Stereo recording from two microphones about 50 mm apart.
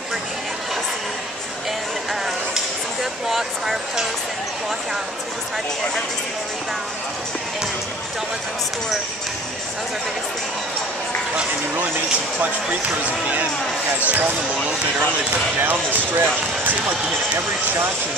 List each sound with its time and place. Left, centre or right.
2.5 s a sound: centre
13.0 s speech: right
15.6 s speech: right